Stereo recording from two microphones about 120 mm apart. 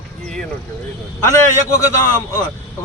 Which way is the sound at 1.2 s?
25° left (ahead or behind).